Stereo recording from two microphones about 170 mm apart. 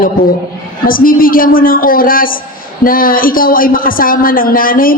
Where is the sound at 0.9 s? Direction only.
55° left (ahead or behind).